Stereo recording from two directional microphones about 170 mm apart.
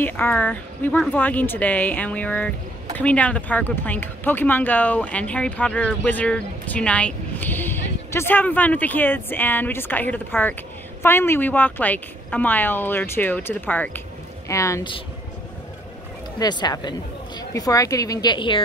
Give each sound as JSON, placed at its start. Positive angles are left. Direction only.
{"t": 0.0, "sound": "speech", "side_deg": 10}
{"t": 16.3, "sound": "a woman's voice", "side_deg": 25}